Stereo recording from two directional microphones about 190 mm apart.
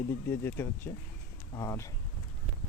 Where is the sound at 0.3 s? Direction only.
10° left (ahead or behind).